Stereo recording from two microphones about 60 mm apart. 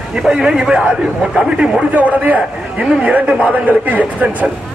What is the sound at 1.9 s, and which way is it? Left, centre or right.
Speech, right.